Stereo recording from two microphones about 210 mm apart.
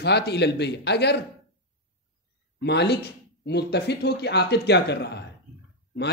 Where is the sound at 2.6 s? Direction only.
55° left (ahead or behind).